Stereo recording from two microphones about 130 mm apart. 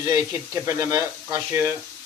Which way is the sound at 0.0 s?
25° right (ahead or behind).